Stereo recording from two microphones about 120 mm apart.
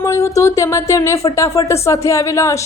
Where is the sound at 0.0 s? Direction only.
25° left (ahead or behind).